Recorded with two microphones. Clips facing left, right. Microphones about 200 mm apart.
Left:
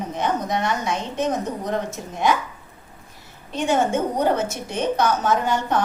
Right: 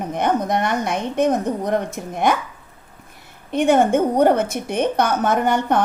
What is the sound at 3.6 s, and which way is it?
A woman's voice, 55° right (ahead or behind).